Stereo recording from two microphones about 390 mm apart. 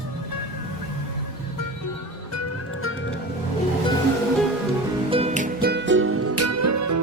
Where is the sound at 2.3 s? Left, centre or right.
Left.